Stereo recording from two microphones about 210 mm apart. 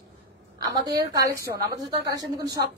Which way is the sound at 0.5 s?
20° right (ahead or behind).